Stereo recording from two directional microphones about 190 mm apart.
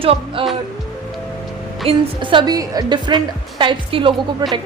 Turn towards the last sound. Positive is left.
turn(degrees=-25)  # may be behind; listen again after turning